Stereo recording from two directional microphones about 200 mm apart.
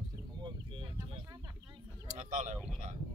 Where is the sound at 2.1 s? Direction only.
35° right (ahead or behind).